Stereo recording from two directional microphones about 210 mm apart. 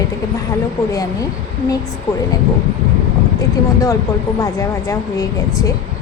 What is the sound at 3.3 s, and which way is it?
A woman's voice, 15° left (ahead or behind).